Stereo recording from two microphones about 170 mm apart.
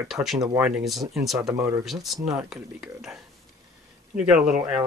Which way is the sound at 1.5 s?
20° right (ahead or behind).